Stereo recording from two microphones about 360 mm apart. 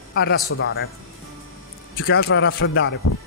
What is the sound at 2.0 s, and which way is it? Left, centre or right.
Speech, left.